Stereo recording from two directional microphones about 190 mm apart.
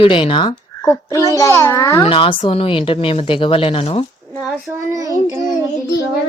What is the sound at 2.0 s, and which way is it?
Speech, 30° left (ahead or behind).